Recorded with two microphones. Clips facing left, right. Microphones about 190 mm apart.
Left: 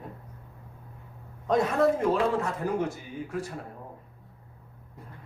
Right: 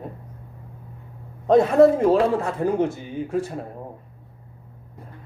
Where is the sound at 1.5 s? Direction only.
30° right (ahead or behind).